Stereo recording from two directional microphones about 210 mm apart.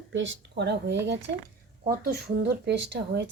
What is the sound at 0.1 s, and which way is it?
Speech, 60° right (ahead or behind).